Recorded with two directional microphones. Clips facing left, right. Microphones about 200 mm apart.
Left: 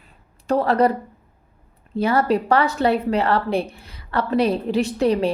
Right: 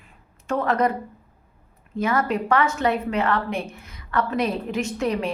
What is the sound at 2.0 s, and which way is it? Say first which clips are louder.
A woman's voice: left 4 dB; 35° left (ahead or behind).